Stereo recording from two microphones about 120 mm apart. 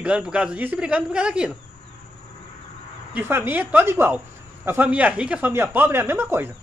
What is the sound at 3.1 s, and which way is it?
A man's voice, 15° right (ahead or behind).